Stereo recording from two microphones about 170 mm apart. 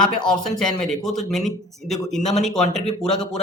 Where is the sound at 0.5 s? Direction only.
5° left (ahead or behind).